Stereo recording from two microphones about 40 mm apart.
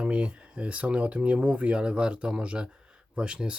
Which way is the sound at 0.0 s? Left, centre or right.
Right.